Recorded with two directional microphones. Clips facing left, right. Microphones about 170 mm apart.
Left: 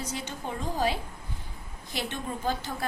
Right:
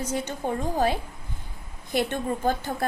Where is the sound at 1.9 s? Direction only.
50° right (ahead or behind).